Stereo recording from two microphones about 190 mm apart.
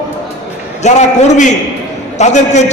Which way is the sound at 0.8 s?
40° left (ahead or behind).